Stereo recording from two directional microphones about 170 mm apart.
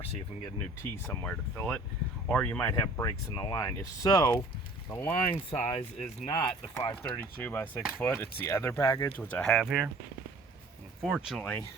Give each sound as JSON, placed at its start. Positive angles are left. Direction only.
{"t": 0.8, "sound": "speech", "side_deg": 10}
{"t": 4.9, "sound": "speech", "side_deg": 15}
{"t": 5.5, "sound": "speech", "side_deg": 35}
{"t": 6.2, "sound": "speech", "side_deg": 30}
{"t": 6.7, "sound": "speech", "side_deg": 15}
{"t": 11.0, "sound": "speech", "side_deg": -5}